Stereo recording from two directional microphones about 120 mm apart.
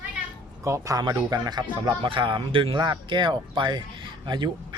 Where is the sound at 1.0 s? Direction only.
35° right (ahead or behind).